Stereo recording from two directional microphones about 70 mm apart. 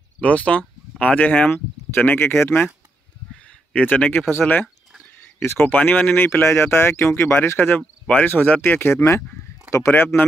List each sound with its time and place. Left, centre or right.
0.2 s speech: centre; by 2.6 s left
3.4 s a sound: left
4.3 s speech: left
5.8 s speech: left
6.2 s speech: left
9.7 s speech: left
9.9 s speech: left